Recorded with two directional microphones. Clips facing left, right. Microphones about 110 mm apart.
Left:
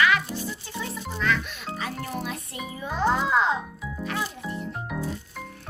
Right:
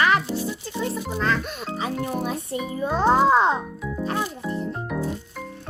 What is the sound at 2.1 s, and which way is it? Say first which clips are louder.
Music: right 6 dB; 40° right (ahead or behind).